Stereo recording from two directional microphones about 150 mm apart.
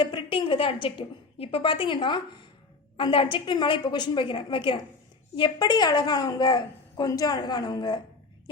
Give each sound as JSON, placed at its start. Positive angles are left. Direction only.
{"t": 0.0, "sound": "a woman's voice", "side_deg": 30}